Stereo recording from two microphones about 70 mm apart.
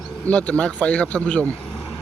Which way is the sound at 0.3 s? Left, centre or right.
Centre.